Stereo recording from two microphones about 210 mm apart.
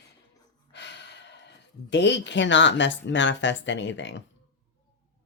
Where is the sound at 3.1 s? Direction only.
60° left (ahead or behind).